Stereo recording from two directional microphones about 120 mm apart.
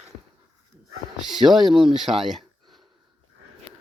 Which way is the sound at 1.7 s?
45° right (ahead or behind).